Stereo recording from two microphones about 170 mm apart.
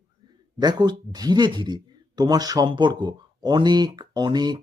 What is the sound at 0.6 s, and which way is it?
Speech, 25° right (ahead or behind).